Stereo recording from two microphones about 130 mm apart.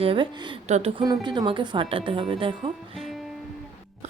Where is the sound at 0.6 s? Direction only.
60° right (ahead or behind).